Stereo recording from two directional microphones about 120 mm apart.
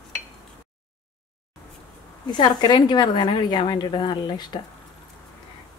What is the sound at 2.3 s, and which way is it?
A woman's voice, 40° left (ahead or behind).